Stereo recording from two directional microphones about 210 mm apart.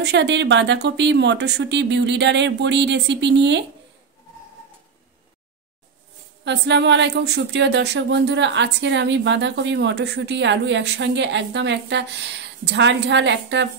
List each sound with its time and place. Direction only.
0.0 s speech: 55° right (ahead or behind)
6.4 s speech: 55° right (ahead or behind)